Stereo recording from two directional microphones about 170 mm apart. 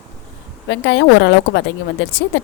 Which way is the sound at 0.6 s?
90° left.